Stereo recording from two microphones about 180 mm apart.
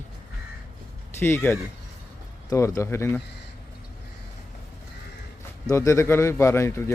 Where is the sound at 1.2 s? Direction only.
15° left (ahead or behind).